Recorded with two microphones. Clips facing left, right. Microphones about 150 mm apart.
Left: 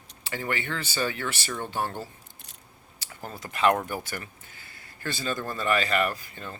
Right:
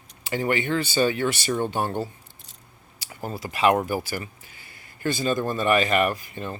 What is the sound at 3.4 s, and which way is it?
Speech, 10° right (ahead or behind).